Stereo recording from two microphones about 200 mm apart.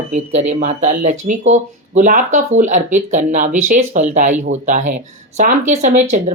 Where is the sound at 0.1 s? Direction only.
35° right (ahead or behind).